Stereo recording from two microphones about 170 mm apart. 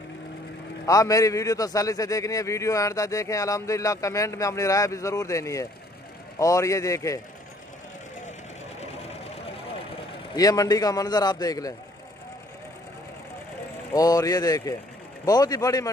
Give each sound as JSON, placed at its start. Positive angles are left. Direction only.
{"t": 0.8, "sound": "a man's voice", "side_deg": 20}
{"t": 9.0, "sound": "sewing machine", "side_deg": 35}
{"t": 10.3, "sound": "a man's voice", "side_deg": 20}
{"t": 13.9, "sound": "a man's voice", "side_deg": 20}